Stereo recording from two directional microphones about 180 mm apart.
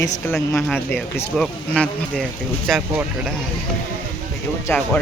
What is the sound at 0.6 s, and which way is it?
Speech, centre (ahead or behind).